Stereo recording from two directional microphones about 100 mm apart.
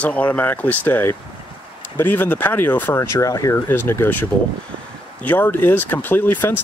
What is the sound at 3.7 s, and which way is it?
Speech, 20° left (ahead or behind).